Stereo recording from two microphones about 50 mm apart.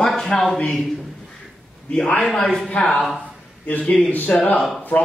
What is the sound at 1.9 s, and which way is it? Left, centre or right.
Speech, centre.